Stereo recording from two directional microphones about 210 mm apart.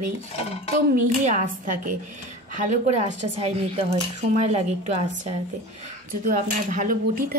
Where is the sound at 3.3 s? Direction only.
30° right (ahead or behind).